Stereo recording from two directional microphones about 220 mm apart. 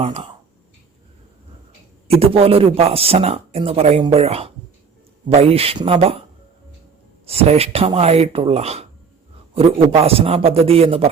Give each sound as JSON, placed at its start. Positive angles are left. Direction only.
{"t": 0.0, "sound": "speech", "side_deg": -25}
{"t": 2.1, "sound": "speech", "side_deg": -25}
{"t": 7.3, "sound": "speech", "side_deg": -30}